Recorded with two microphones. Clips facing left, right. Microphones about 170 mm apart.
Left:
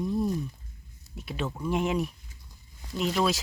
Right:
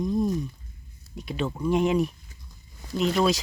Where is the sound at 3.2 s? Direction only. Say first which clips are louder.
Right 3 dB; centre (ahead or behind).